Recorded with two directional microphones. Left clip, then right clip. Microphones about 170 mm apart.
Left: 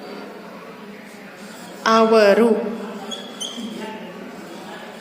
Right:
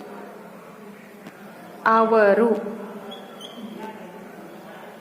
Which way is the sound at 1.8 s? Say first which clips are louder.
Left 3 dB; 15° left (ahead or behind).